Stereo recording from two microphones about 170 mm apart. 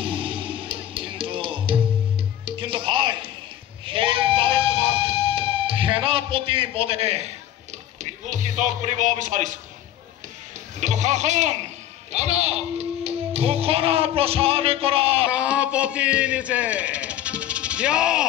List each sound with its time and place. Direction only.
0.0 s music: 30° right (ahead or behind)
3.8 s sheep: 30° right (ahead or behind)
8.0 s speech: 45° right (ahead or behind)
10.8 s speech: 45° right (ahead or behind)
15.2 s a man's voice: 5° right (ahead or behind)